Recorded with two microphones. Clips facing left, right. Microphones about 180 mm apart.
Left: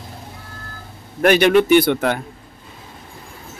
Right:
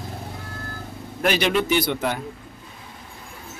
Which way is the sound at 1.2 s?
60° left (ahead or behind).